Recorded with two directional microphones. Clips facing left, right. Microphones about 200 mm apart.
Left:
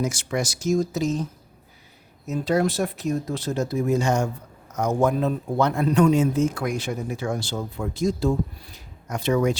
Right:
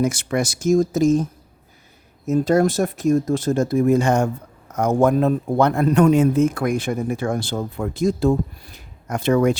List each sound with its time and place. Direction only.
0.0 s speech: 60° right (ahead or behind)